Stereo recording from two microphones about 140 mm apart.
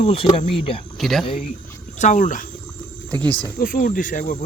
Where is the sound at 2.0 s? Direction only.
65° left (ahead or behind).